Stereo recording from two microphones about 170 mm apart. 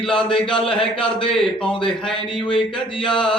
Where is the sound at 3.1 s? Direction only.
5° left (ahead or behind).